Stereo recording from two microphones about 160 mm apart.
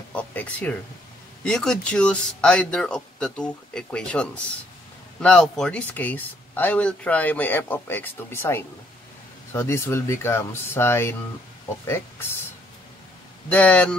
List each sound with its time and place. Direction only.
0.1 s speech: 10° left (ahead or behind)
13.5 s speech: 10° left (ahead or behind)